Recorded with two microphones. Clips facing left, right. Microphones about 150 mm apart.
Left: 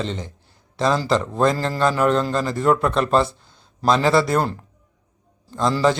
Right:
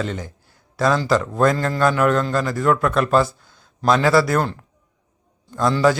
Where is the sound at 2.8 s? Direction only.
25° left (ahead or behind).